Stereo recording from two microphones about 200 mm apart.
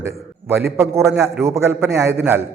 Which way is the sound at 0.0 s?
10° right (ahead or behind).